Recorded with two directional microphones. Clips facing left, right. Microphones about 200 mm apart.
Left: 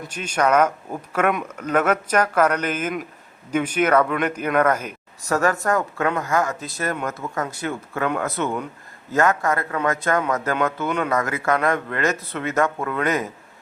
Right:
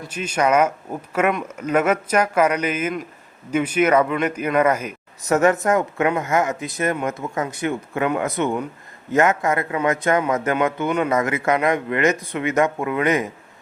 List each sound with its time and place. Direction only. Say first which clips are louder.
0.0 s speech: right 1 dB; 10° right (ahead or behind)
5.3 s speech: right 4 dB; 20° right (ahead or behind)
10.8 s speech: right 3 dB; 5° right (ahead or behind)
11.1 s speech: right 2 dB; 20° right (ahead or behind)